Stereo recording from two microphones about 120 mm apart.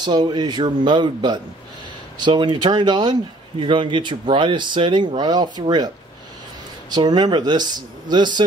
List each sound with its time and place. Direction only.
0.0 s a man's voice: 40° right (ahead or behind)
6.9 s a man's voice: 35° right (ahead or behind)